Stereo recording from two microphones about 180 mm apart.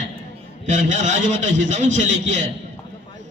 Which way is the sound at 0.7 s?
40° right (ahead or behind).